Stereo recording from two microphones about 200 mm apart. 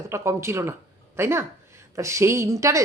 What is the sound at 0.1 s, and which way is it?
Speech, 15° right (ahead or behind).